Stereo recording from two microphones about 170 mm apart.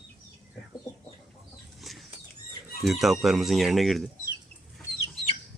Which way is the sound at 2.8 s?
Centre (ahead or behind).